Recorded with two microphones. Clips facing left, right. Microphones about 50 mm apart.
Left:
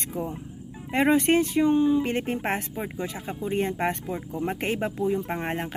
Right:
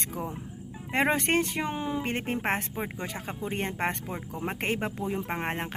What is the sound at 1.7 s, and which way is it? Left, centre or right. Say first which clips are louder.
Speech: left 10 dB; right.